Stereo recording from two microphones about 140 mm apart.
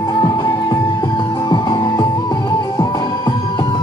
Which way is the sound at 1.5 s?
30° left (ahead or behind).